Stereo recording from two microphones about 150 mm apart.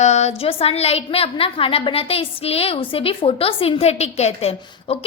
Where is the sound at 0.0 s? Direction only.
50° left (ahead or behind).